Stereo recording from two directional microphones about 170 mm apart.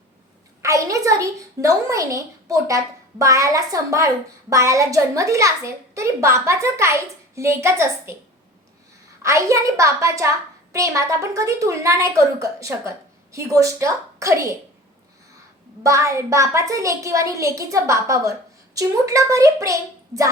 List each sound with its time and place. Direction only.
0.6 s a woman's voice: 20° right (ahead or behind)
9.2 s a woman's voice: 15° right (ahead or behind)
15.8 s a woman's voice: 20° right (ahead or behind)